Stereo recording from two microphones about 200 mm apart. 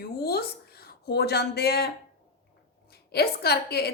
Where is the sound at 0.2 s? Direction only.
50° left (ahead or behind).